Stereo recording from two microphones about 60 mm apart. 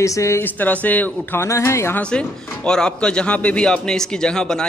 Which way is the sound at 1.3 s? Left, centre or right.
Left.